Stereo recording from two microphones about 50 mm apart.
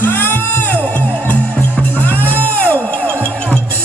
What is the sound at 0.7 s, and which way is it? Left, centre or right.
Music, left.